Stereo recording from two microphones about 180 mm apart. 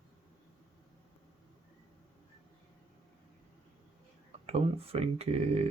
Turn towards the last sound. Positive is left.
turn(degrees=-35)  # may be behind; listen again after turning